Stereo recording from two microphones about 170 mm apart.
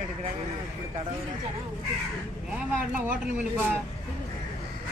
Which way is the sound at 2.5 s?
5° right (ahead or behind).